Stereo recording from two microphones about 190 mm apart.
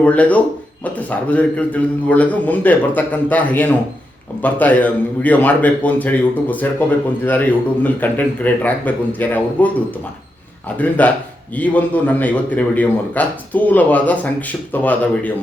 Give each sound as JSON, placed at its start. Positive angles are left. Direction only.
{"t": 0.0, "sound": "a man's voice", "side_deg": 10}
{"t": 10.8, "sound": "a man's voice", "side_deg": 10}